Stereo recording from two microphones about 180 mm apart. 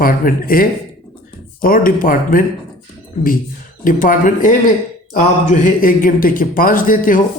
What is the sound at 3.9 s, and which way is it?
Speech, 50° left (ahead or behind).